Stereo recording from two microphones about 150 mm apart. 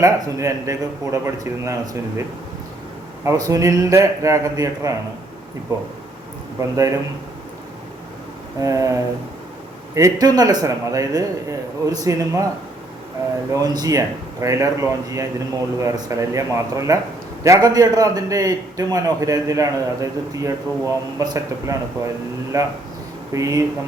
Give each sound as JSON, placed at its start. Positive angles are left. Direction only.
{"t": 0.0, "sound": "a man's voice", "side_deg": -20}
{"t": 3.2, "sound": "a man's voice", "side_deg": -25}
{"t": 6.6, "sound": "a man's voice", "side_deg": -20}
{"t": 8.6, "sound": "a man's voice", "side_deg": -20}
{"t": 13.5, "sound": "a man's voice", "side_deg": -25}